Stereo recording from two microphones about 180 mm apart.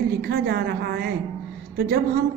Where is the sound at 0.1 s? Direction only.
60° right (ahead or behind).